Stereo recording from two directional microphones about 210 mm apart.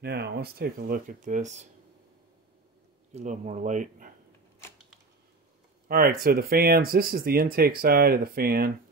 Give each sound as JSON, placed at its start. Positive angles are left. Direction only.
{"t": 0.0, "sound": "speech", "side_deg": -50}
{"t": 3.1, "sound": "speech", "side_deg": -35}
{"t": 5.9, "sound": "speech", "side_deg": -45}